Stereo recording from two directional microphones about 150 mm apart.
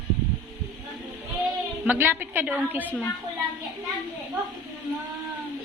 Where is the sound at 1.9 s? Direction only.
15° right (ahead or behind).